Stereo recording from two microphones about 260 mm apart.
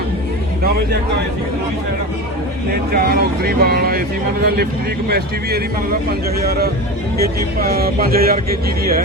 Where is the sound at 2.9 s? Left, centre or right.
Right.